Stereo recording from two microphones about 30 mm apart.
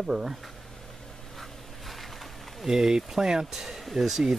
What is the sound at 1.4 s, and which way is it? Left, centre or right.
Bee, centre.